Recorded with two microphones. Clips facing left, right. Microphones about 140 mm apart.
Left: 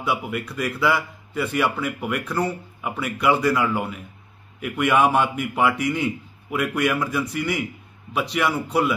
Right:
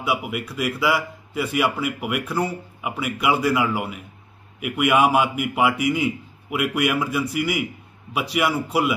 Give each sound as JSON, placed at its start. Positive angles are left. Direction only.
{"t": 0.0, "sound": "speech", "side_deg": -5}